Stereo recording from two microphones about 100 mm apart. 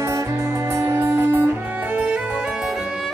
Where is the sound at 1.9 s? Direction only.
10° right (ahead or behind).